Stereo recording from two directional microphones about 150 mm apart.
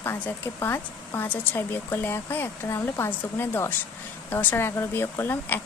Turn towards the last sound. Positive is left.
turn(degrees=15)  # may be behind; listen again after turning